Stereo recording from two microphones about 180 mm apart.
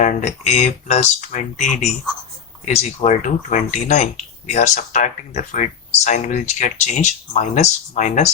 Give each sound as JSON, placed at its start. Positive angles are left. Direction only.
{"t": 0.0, "sound": "speech", "side_deg": 40}